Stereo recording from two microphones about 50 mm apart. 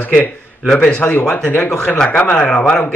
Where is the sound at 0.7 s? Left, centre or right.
Centre.